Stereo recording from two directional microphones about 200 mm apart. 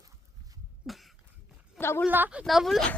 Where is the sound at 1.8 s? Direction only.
10° left (ahead or behind).